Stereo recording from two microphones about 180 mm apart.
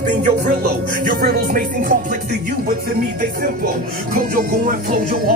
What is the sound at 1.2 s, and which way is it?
Music, 60° right (ahead or behind).